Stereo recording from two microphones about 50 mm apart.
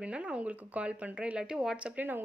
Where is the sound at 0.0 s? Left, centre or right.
Right.